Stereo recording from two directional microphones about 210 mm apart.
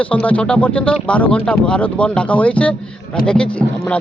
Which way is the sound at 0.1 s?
5° left (ahead or behind).